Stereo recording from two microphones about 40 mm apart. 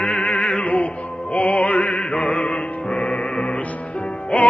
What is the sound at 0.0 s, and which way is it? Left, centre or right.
Music, left.